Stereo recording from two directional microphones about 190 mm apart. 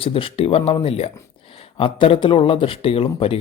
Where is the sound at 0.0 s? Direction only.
30° left (ahead or behind).